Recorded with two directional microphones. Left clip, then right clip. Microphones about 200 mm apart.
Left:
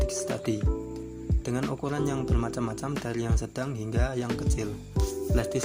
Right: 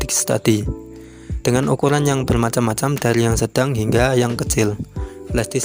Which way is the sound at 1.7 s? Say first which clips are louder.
Right 13 dB; 60° right (ahead or behind).